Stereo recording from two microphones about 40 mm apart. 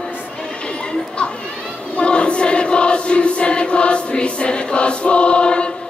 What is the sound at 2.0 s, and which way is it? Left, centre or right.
Choir, left.